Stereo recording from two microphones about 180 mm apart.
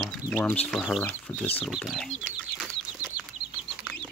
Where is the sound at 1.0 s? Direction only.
10° left (ahead or behind); by 3.1 s 5° right (ahead or behind).